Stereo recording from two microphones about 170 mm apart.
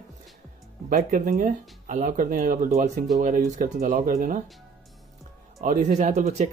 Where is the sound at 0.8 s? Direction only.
50° right (ahead or behind).